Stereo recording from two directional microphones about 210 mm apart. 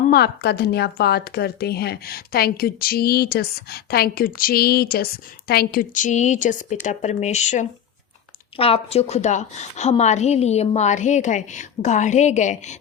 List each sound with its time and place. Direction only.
0.1 s a woman's voice: 50° left (ahead or behind); by 12.7 s 35° left (ahead or behind)